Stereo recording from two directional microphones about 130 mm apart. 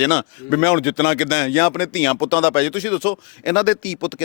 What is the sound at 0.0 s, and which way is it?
Speech, 15° left (ahead or behind).